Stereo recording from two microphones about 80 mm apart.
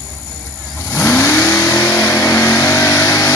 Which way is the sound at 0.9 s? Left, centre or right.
Left.